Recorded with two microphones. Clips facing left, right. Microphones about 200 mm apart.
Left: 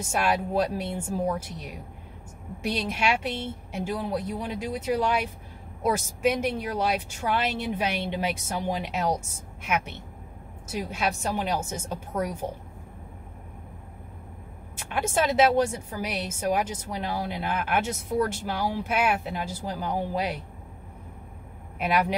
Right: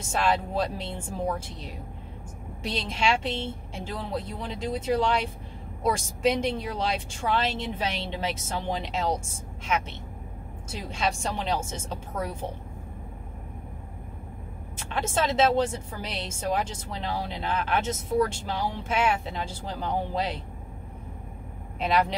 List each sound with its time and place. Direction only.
0.1 s a woman's voice: 10° left (ahead or behind)
2.6 s a woman's voice: 10° left (ahead or behind)
11.0 s a woman's voice: 5° left (ahead or behind)
14.9 s a woman's voice: 10° left (ahead or behind)
21.7 s a woman's voice: 10° left (ahead or behind)